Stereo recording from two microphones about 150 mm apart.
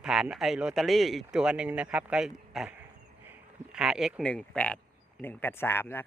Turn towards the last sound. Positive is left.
turn(degrees=15)  # may be behind; listen again after turning